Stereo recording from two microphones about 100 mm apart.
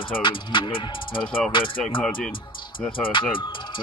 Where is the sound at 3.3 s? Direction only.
55° left (ahead or behind).